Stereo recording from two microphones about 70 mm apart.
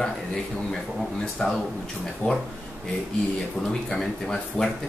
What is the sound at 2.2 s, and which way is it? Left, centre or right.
Speech, left.